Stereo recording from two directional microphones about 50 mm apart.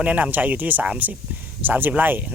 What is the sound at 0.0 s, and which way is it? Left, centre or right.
Speech, right.